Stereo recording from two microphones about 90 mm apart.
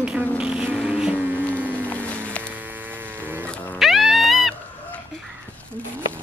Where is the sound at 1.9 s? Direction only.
15° left (ahead or behind).